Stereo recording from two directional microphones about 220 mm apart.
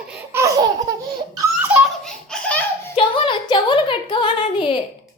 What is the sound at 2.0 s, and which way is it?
Belly laugh, 5° left (ahead or behind).